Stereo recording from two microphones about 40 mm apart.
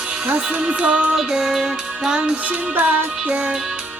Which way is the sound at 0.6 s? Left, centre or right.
Right.